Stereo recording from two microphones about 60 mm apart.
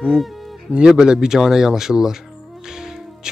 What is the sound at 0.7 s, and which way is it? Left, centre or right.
Speech, centre.